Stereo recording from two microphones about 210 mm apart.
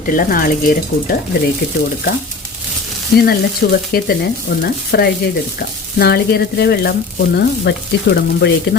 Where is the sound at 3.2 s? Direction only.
45° left (ahead or behind).